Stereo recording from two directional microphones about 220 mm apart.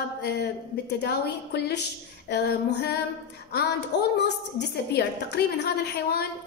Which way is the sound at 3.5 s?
45° left (ahead or behind).